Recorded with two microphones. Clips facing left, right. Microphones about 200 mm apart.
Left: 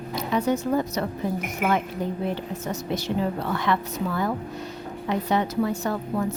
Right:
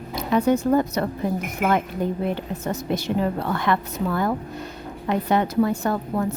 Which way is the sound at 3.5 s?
55° right (ahead or behind).